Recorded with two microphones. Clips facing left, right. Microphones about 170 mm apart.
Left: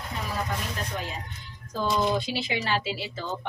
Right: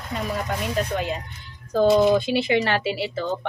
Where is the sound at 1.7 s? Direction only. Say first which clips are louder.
Right 9 dB; 60° right (ahead or behind).